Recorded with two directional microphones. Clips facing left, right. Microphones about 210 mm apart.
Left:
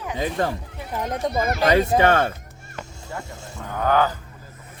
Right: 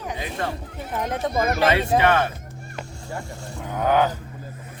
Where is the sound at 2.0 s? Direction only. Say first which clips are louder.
Left 1 dB; 45° left (ahead or behind).